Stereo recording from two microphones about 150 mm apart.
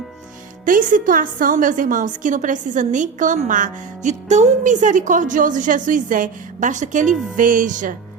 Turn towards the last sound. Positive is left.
turn(degrees=-60)  # may be behind; listen again after turning